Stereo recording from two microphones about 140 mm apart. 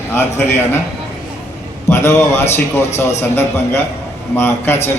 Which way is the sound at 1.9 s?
20° left (ahead or behind).